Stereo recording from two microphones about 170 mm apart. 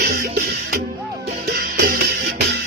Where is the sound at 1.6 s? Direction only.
60° right (ahead or behind).